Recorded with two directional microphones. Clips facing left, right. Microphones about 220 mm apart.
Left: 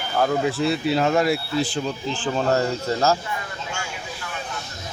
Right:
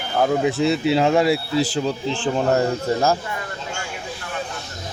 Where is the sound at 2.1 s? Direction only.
20° right (ahead or behind).